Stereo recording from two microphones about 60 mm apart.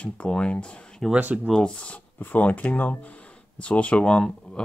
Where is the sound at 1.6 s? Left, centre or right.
Centre.